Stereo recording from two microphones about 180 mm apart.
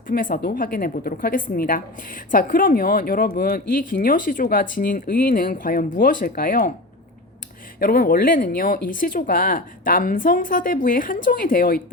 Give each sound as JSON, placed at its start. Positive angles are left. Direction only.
{"t": 0.1, "sound": "a woman's voice", "side_deg": 50}
{"t": 7.8, "sound": "a woman's voice", "side_deg": 55}